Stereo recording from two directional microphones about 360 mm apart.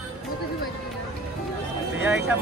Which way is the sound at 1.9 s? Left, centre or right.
Centre.